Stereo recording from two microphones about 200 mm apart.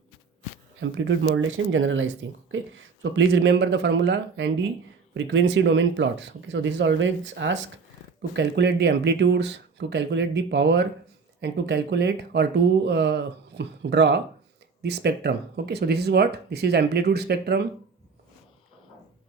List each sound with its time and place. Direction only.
0.8 s speech: 65° right (ahead or behind)